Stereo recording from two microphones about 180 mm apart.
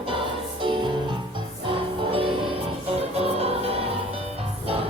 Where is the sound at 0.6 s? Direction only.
25° right (ahead or behind).